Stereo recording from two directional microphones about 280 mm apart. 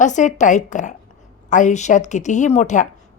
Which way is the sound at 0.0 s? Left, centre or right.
Left.